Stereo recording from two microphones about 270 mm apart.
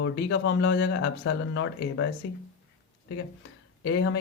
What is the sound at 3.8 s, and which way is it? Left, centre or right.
Speech, left.